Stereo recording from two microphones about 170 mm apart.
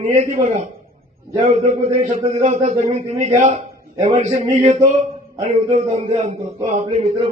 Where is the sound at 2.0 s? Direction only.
45° right (ahead or behind).